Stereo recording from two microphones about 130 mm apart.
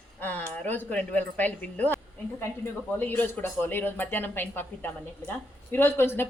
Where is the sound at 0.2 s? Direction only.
15° left (ahead or behind).